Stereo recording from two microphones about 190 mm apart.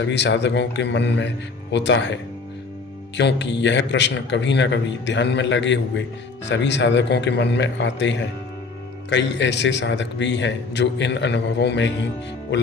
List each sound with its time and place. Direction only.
0.0 s a man's voice: 70° left (ahead or behind)
3.2 s a man's voice: 65° left (ahead or behind)